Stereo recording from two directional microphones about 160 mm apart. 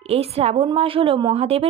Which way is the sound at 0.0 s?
40° right (ahead or behind).